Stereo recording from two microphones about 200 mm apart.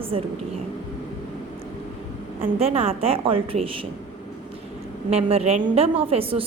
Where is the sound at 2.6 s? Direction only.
30° right (ahead or behind).